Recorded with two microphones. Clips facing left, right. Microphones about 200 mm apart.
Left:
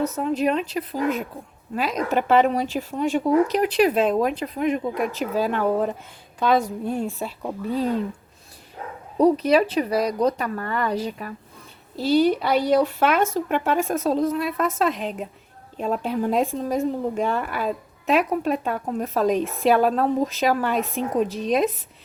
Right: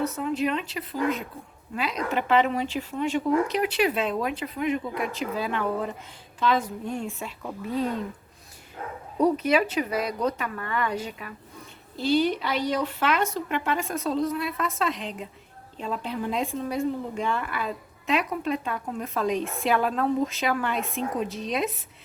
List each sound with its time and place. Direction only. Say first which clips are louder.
0.0 s speech: left 4 dB; 40° left (ahead or behind)
9.1 s speech: left 5 dB; 35° left (ahead or behind)
21.2 s speech: left 5 dB; centre (ahead or behind)